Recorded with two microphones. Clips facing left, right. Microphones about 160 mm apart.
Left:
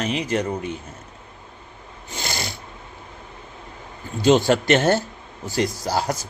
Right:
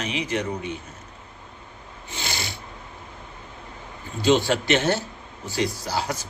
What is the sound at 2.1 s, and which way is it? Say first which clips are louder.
Snoring: left 3 dB; 45° left (ahead or behind).